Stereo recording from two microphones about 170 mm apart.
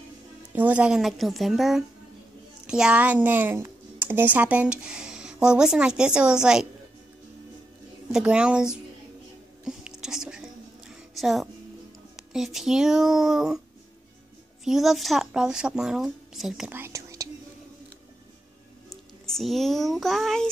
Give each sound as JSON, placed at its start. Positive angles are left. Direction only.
{"t": 0.5, "sound": "speech", "side_deg": -10}
{"t": 8.1, "sound": "speech", "side_deg": -5}
{"t": 9.7, "sound": "whispering", "side_deg": -5}
{"t": 11.1, "sound": "speech", "side_deg": 0}
{"t": 14.6, "sound": "speech", "side_deg": 0}
{"t": 16.7, "sound": "whispering", "side_deg": -15}
{"t": 18.9, "sound": "a child's voice", "side_deg": 0}